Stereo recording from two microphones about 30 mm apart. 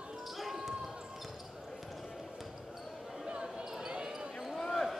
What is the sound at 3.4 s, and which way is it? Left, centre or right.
Basketball bounce, right.